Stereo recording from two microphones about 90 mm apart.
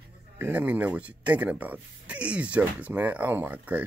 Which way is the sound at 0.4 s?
20° right (ahead or behind).